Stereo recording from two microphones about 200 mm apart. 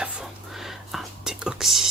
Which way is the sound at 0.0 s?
5° right (ahead or behind).